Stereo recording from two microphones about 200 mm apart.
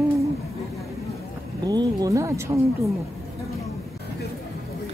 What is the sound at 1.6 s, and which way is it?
Speech, 20° right (ahead or behind).